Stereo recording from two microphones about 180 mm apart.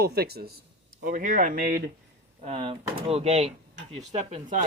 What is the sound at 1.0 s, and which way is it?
Speech, 45° right (ahead or behind).